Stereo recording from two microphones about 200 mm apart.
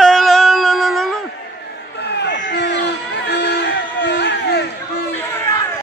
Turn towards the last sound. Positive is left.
turn(degrees=15)  # may be behind; listen again after turning